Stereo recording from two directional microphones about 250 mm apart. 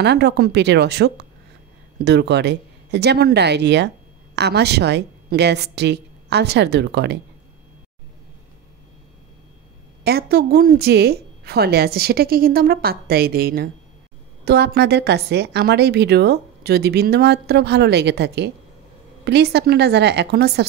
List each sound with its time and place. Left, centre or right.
0.0 s a woman's voice: right
10.0 s a woman's voice: right